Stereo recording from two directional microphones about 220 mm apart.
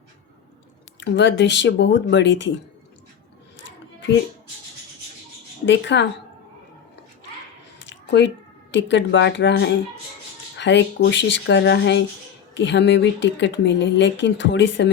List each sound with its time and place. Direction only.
0.9 s speech: 55° left (ahead or behind)
5.6 s speech: 55° left (ahead or behind)
7.8 s a sound: 55° left (ahead or behind)
8.7 s speech: 55° left (ahead or behind)